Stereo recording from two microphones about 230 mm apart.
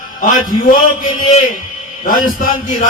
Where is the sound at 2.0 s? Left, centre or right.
Left.